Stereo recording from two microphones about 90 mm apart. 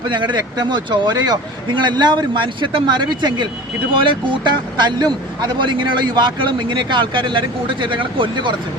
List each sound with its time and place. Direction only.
0.1 s speech: 60° right (ahead or behind)